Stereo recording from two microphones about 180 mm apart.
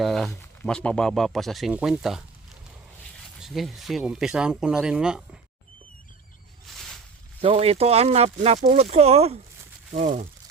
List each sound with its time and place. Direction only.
0.0 s speech: centre (ahead or behind)
3.4 s speech: centre (ahead or behind)
6.7 s a sound: centre (ahead or behind)
7.4 s speech: 35° right (ahead or behind)